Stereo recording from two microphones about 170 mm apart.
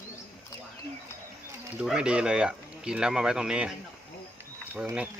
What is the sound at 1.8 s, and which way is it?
Speech, 5° right (ahead or behind).